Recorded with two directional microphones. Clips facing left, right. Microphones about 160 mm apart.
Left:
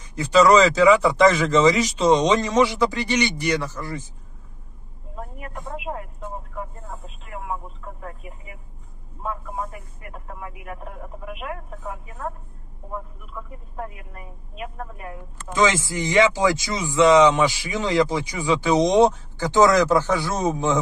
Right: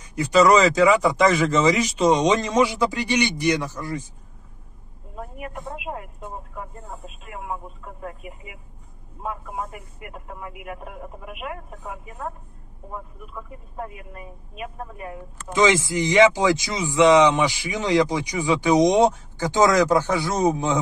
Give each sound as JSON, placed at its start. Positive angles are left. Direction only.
{"t": 0.1, "sound": "speech", "side_deg": -10}
{"t": 5.4, "sound": "speech", "side_deg": -20}
{"t": 11.3, "sound": "speech", "side_deg": -15}
{"t": 15.7, "sound": "speech", "side_deg": -20}